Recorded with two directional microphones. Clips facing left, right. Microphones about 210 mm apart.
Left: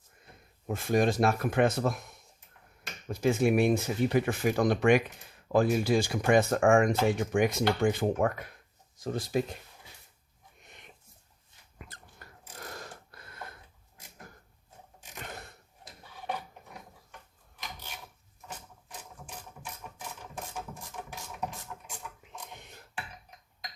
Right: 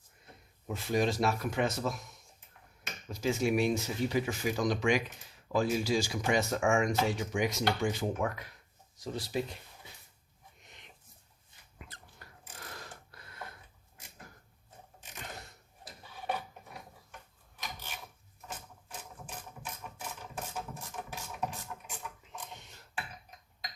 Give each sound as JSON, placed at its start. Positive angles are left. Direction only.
{"t": 0.7, "sound": "speech", "side_deg": 50}
{"t": 3.1, "sound": "speech", "side_deg": 55}